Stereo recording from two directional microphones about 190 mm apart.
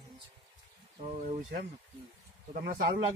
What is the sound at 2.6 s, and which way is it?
Speech, 55° right (ahead or behind).